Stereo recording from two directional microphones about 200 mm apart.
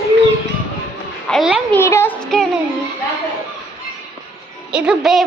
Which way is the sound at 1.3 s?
5° right (ahead or behind).